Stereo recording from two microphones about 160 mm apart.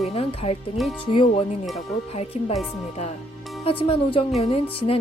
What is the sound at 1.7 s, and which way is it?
Speech, 40° left (ahead or behind).